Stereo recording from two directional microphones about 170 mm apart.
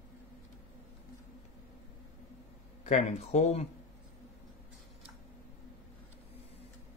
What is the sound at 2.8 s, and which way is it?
Speech, 40° left (ahead or behind).